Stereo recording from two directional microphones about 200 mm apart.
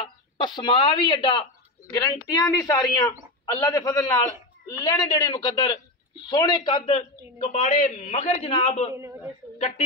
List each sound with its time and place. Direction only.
0.0 s a man's voice: 20° left (ahead or behind)
8.9 s a man's voice: 15° right (ahead or behind)